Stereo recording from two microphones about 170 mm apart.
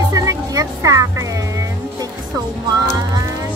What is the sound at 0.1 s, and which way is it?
Music, 20° right (ahead or behind).